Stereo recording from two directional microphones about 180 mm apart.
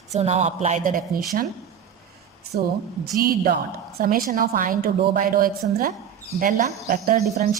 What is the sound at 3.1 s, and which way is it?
A woman's voice, 55° right (ahead or behind).